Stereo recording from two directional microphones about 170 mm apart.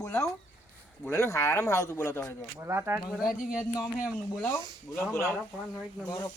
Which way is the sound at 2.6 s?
15° right (ahead or behind).